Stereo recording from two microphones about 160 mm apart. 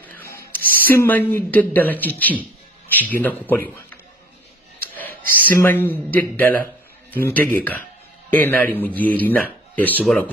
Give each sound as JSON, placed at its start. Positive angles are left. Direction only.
{"t": 0.0, "sound": "a sound", "side_deg": 10}
{"t": 0.5, "sound": "a woman's voice", "side_deg": 10}
{"t": 5.6, "sound": "a man's voice", "side_deg": 15}